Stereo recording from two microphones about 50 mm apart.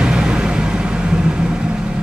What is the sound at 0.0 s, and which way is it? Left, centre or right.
Vehicle, centre.